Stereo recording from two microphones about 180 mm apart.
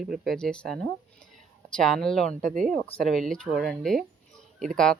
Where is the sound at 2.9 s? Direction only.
Centre (ahead or behind).